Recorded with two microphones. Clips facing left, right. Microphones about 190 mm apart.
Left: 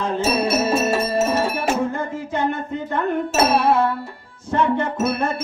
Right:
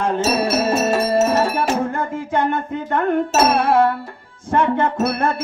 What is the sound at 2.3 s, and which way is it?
Wind chime, 55° right (ahead or behind).